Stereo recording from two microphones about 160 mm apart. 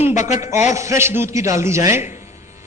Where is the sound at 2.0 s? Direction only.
50° left (ahead or behind).